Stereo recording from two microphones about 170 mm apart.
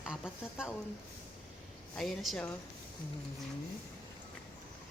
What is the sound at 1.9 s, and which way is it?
Speech, centre (ahead or behind).